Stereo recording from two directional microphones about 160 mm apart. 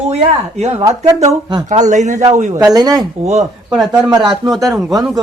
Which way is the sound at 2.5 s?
20° right (ahead or behind).